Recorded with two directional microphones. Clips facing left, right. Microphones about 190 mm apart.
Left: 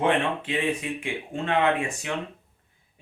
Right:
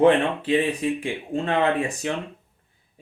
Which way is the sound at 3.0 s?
35° right (ahead or behind).